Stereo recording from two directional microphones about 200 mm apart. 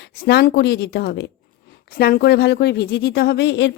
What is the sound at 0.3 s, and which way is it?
Speech, 55° left (ahead or behind).